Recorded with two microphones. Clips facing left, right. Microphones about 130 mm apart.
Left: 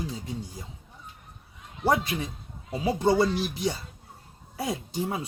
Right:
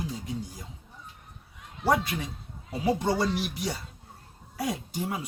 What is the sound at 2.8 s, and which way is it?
Speech, 25° left (ahead or behind).